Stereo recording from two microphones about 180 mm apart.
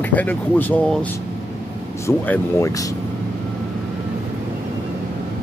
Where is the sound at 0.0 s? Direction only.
10° left (ahead or behind).